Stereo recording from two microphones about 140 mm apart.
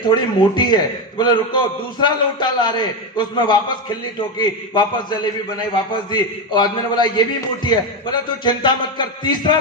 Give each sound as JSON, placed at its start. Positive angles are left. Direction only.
{"t": 0.0, "sound": "a man's voice", "side_deg": 35}